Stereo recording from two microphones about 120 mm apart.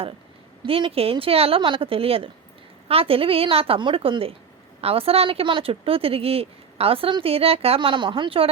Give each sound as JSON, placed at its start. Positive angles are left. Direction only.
{"t": 0.6, "sound": "speech", "side_deg": -50}